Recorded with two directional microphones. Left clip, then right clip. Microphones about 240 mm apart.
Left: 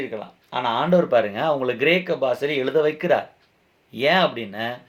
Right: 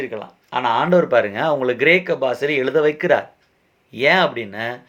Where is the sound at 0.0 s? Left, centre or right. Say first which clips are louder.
Right 3 dB; right.